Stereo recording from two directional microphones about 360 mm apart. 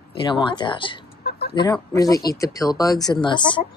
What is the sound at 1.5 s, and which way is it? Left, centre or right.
Speech, centre.